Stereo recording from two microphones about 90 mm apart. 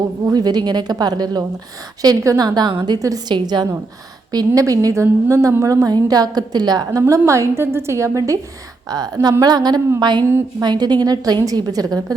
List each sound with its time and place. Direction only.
0.3 s a woman's voice: 50° right (ahead or behind)
2.4 s a woman's voice: 50° right (ahead or behind)
4.3 s a woman's voice: 45° right (ahead or behind)
7.1 s a woman's voice: 35° right (ahead or behind)
9.4 s a woman's voice: 50° right (ahead or behind)